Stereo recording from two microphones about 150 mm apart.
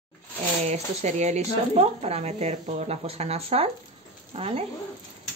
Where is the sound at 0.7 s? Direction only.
50° right (ahead or behind).